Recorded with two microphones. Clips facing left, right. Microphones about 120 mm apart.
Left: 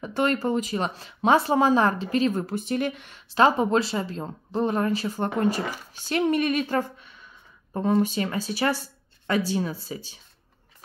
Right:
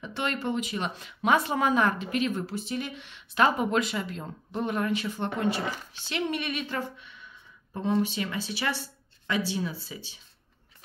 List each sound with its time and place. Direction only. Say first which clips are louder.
0.0 s speech: left 7 dB; 40° left (ahead or behind)
2.4 s speech: left 6 dB; 50° left (ahead or behind)
3.3 s speech: left 4 dB; 30° left (ahead or behind)